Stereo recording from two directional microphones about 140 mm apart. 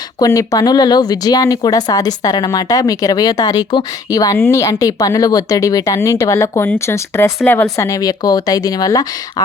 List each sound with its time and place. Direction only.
0.2 s speech: 25° left (ahead or behind)